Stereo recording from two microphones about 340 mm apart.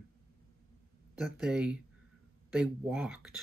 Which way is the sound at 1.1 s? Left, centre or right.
Centre.